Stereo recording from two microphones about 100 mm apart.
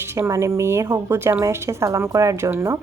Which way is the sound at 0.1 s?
30° right (ahead or behind).